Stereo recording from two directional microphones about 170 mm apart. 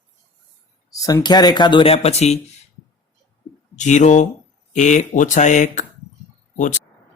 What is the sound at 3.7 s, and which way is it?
Speech, 45° left (ahead or behind).